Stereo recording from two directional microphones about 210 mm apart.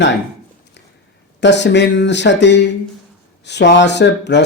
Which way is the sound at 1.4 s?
55° left (ahead or behind).